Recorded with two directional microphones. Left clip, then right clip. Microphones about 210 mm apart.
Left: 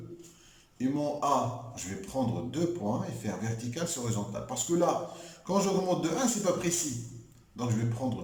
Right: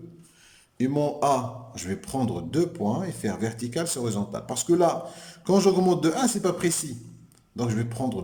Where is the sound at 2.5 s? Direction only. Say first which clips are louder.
Right 6 dB; 50° right (ahead or behind).